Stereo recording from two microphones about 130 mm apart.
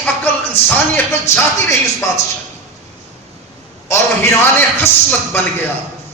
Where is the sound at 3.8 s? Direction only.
20° left (ahead or behind).